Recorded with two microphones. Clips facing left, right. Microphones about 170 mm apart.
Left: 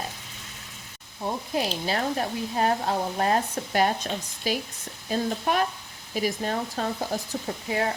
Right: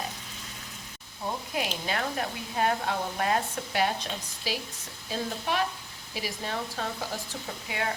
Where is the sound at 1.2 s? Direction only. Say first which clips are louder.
Left 4 dB; 30° left (ahead or behind).